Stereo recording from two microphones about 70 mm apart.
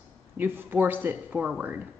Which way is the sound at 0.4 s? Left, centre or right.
Right.